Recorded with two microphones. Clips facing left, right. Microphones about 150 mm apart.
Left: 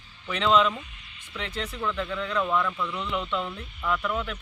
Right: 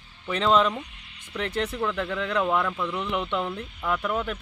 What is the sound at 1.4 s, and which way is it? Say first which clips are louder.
Speech: right 5 dB; 55° right (ahead or behind).